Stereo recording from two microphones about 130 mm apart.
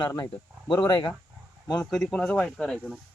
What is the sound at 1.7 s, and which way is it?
Speech, 5° left (ahead or behind).